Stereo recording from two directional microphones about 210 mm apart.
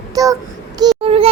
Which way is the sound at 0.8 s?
20° right (ahead or behind).